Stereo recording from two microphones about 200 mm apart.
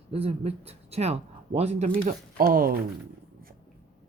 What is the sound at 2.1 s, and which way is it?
Speech, 45° right (ahead or behind).